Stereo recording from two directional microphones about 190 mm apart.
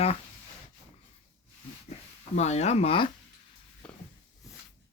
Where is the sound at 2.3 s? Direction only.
35° left (ahead or behind).